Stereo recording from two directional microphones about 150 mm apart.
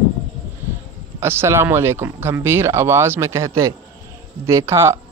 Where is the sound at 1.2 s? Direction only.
15° right (ahead or behind).